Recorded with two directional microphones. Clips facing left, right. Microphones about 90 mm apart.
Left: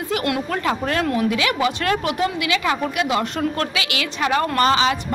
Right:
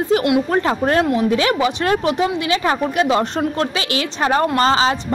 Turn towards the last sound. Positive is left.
turn(degrees=-30)  # may be behind; listen again after turning